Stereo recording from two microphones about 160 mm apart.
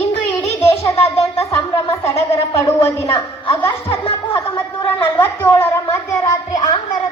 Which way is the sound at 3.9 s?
35° left (ahead or behind).